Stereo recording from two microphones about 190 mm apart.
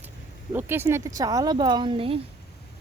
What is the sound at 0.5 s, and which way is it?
A woman's voice, 10° right (ahead or behind).